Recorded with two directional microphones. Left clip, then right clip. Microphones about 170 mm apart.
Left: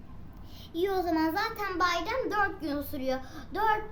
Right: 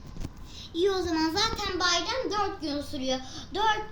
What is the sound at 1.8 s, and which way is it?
Speech, 15° left (ahead or behind).